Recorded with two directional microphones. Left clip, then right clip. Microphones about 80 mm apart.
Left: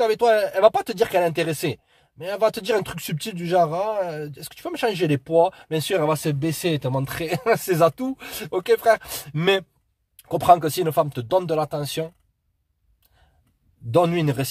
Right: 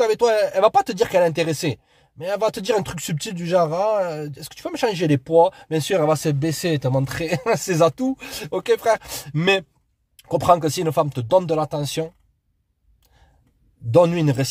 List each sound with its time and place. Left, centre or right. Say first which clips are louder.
0.0 s speech: right 1 dB; right
6.1 s speech: right 2 dB; right
6.9 s speech: right 3 dB; right
13.8 s speech: right 3 dB; right